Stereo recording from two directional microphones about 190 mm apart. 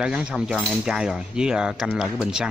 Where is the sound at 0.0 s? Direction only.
5° right (ahead or behind).